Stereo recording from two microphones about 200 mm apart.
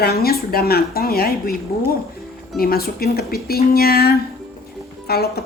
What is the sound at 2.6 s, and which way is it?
A woman's voice, 50° left (ahead or behind).